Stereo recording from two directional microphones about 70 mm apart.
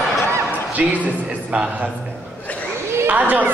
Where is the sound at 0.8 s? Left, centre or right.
Centre.